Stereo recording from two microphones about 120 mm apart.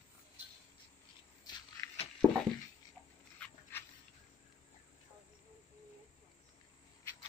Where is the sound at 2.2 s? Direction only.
25° right (ahead or behind).